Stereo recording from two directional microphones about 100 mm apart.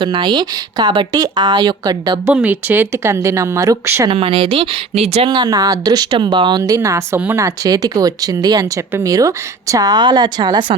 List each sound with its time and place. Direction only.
0.0 s speech: 50° right (ahead or behind)
2.3 s speech: 15° right (ahead or behind)
4.1 s speech: 60° right (ahead or behind); by 5.3 s 90° right
5.3 s speech: 40° right (ahead or behind)
6.6 s speech: 30° right (ahead or behind); by 10.8 s 45° right (ahead or behind)